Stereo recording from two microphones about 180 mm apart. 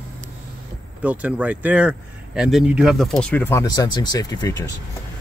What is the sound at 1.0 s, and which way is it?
Speech, 10° right (ahead or behind).